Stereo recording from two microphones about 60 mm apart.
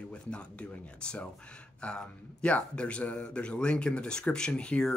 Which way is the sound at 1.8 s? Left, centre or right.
Centre.